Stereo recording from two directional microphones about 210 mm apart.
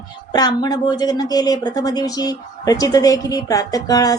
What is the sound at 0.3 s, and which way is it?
A woman's voice, 20° left (ahead or behind).